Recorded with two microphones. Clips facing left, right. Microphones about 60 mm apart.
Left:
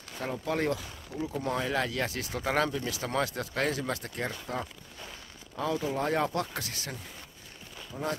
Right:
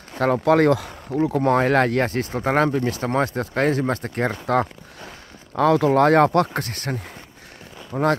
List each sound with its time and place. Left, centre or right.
0.2 s speech: right